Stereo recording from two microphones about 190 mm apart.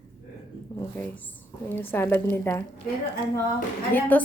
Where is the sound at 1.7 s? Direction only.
10° left (ahead or behind).